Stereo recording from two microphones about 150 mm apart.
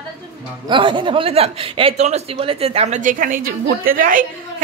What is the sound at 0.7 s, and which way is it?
A woman's voice, 35° right (ahead or behind).